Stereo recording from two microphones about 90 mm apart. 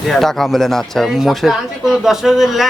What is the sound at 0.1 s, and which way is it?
Speech, 5° left (ahead or behind).